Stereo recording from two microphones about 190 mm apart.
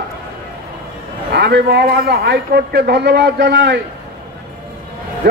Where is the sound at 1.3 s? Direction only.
60° right (ahead or behind).